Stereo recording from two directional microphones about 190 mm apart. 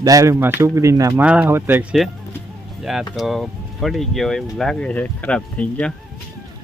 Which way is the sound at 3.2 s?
Centre (ahead or behind).